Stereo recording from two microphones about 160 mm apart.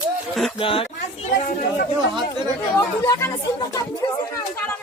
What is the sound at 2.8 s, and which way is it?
Speech, 20° left (ahead or behind).